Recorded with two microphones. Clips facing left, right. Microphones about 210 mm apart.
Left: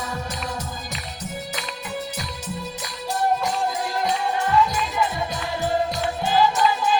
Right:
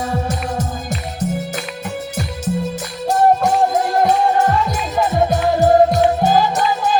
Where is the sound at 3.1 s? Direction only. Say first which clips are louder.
Right 9 dB; 45° right (ahead or behind).